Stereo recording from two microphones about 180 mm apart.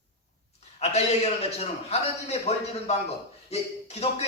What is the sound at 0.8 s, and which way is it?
A man's voice, 35° left (ahead or behind).